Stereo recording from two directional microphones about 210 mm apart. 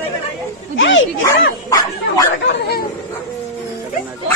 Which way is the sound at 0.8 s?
65° left (ahead or behind).